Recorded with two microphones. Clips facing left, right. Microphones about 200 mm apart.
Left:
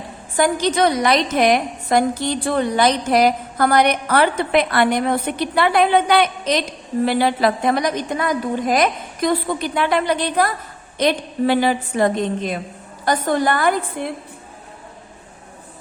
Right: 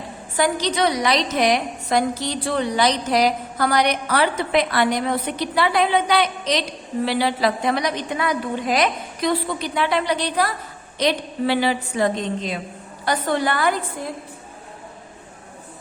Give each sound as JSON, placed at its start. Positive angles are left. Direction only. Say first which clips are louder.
{"t": 0.3, "sound": "a woman's voice", "louder": "left 3 dB", "side_deg": 50}